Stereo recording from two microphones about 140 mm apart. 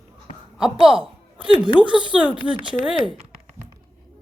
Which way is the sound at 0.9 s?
40° right (ahead or behind).